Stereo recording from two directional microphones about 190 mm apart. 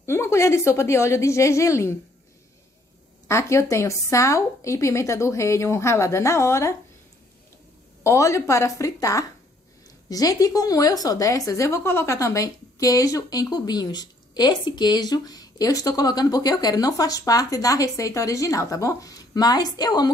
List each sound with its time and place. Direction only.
0.0 s a woman's voice: 15° left (ahead or behind)
3.3 s a woman's voice: 15° left (ahead or behind)
8.0 s a woman's voice: 15° left (ahead or behind)